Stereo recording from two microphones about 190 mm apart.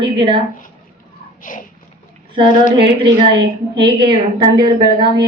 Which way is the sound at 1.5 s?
45° left (ahead or behind).